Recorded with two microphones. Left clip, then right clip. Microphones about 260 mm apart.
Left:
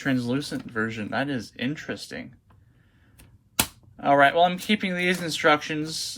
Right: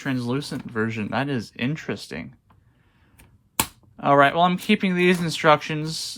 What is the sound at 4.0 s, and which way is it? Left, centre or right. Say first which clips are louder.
Speech: right 1 dB; right.